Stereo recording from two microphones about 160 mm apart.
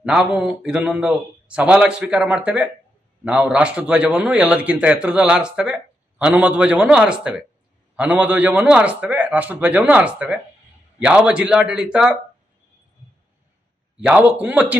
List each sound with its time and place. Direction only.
0.0 s a man's voice: 5° right (ahead or behind)
14.0 s a man's voice: 5° right (ahead or behind)